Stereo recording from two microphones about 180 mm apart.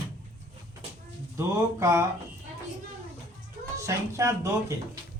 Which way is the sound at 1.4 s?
15° right (ahead or behind).